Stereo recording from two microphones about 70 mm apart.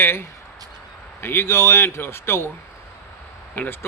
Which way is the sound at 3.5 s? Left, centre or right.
Left.